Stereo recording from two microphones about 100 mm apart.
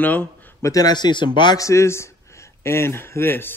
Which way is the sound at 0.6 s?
40° left (ahead or behind).